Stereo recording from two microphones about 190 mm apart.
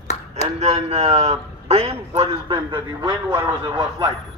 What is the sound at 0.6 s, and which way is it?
A man's voice, 35° right (ahead or behind).